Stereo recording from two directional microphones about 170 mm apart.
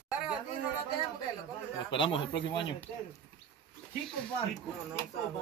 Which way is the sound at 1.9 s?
30° left (ahead or behind).